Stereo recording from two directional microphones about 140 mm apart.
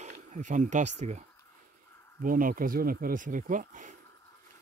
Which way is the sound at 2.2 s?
80° right.